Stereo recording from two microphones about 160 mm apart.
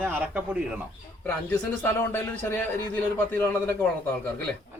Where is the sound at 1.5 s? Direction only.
10° left (ahead or behind).